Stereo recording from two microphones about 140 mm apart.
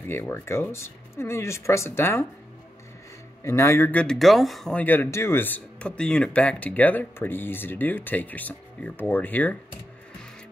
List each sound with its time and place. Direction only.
0.1 s speech: 15° left (ahead or behind)
3.4 s speech: 20° left (ahead or behind)